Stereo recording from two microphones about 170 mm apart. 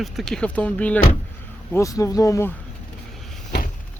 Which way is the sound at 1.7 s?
20° left (ahead or behind).